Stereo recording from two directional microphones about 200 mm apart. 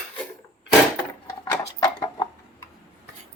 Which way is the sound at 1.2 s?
15° left (ahead or behind).